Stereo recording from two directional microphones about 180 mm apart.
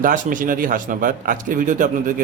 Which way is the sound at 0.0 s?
50° right (ahead or behind).